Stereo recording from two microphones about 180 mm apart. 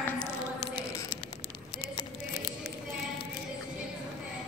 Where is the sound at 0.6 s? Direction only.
25° left (ahead or behind).